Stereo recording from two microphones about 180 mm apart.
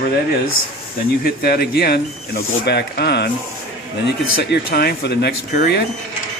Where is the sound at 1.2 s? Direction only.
60° left (ahead or behind).